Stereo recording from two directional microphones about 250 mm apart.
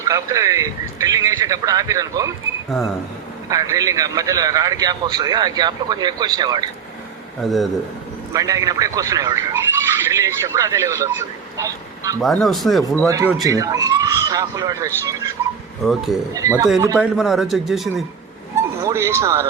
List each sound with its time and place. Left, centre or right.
0.0 s a man's voice: centre
3.5 s a man's voice: centre
7.4 s speech: centre
8.3 s a man's voice: centre
12.2 s speech: centre
13.1 s a man's voice: centre
15.8 s speech: centre
16.3 s a man's voice: centre
17.2 s speech: centre
18.5 s speech: centre